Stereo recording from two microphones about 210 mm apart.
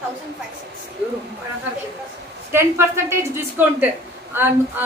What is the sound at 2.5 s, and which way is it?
A woman's voice, 10° right (ahead or behind).